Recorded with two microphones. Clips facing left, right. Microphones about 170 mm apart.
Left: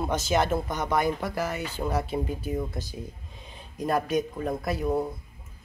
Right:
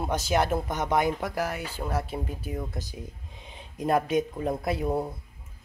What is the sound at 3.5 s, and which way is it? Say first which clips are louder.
Speech: right 2 dB; 20° right (ahead or behind).